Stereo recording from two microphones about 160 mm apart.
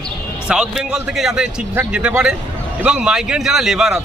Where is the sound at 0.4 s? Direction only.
5° right (ahead or behind).